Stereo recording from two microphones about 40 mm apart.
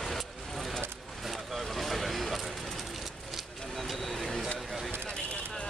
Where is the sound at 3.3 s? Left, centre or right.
Centre.